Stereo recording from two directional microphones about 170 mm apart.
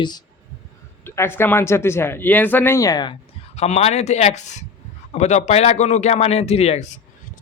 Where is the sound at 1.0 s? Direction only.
15° left (ahead or behind).